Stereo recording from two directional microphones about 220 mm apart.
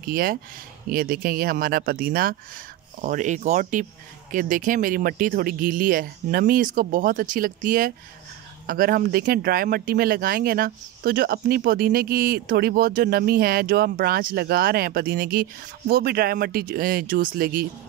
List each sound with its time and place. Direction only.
0.0 s speech: 40° right (ahead or behind)